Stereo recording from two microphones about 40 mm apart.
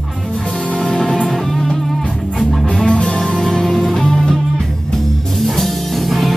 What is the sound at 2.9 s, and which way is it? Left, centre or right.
Music, left.